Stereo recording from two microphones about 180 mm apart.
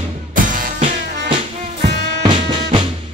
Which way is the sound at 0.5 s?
45° right (ahead or behind).